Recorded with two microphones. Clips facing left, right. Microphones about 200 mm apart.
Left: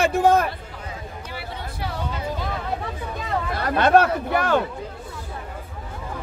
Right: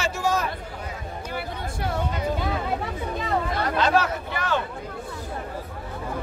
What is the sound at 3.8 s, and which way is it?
Speech, 55° left (ahead or behind).